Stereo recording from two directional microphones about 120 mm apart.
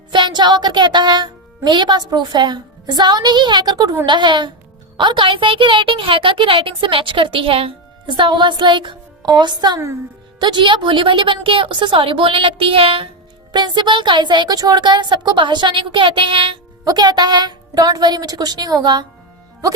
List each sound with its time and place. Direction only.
0.1 s a woman's voice: 40° right (ahead or behind)
13.5 s a woman's voice: 40° right (ahead or behind)
16.8 s a woman's voice: 35° right (ahead or behind)